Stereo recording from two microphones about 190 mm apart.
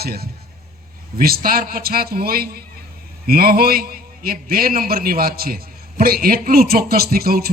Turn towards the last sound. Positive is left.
turn(degrees=-50)  # may be behind; listen again after turning